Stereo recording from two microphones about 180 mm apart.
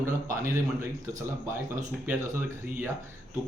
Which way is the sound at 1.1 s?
15° right (ahead or behind).